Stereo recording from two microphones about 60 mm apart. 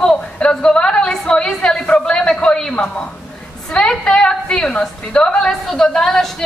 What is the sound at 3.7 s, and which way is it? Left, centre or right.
A woman's voice, centre.